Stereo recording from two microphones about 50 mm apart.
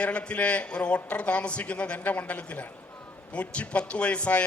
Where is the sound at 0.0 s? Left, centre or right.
Left.